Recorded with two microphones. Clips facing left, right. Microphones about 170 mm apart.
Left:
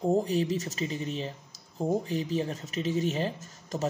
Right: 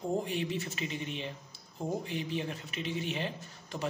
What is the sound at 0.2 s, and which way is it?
Speech, 40° left (ahead or behind).